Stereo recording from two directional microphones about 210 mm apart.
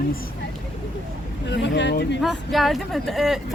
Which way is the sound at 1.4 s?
55° left (ahead or behind).